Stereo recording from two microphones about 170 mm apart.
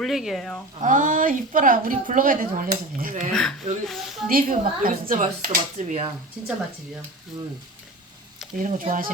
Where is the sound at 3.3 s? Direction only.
5° left (ahead or behind).